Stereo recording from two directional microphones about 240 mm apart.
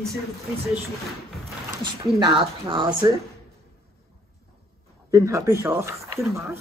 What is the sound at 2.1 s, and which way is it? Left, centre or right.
Speech, centre.